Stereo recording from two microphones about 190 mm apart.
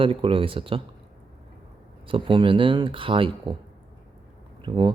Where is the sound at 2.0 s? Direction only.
25° right (ahead or behind).